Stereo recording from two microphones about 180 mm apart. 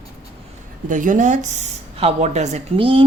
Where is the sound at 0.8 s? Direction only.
45° right (ahead or behind); by 3.0 s 30° right (ahead or behind).